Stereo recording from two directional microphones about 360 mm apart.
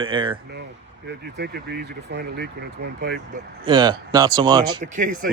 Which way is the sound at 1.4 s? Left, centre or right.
Right.